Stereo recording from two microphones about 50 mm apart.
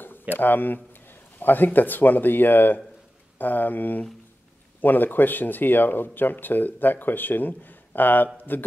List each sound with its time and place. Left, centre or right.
0.3 s speech: left